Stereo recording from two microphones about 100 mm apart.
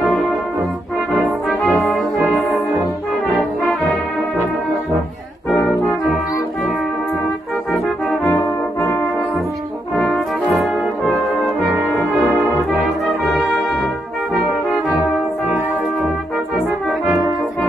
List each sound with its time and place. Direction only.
1.6 s brass instrument: 15° left (ahead or behind)
7.7 s brass instrument: 15° left (ahead or behind)